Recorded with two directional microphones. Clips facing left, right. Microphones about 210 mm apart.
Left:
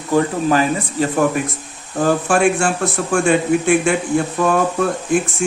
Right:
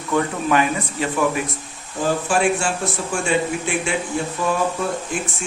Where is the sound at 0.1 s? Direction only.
35° left (ahead or behind).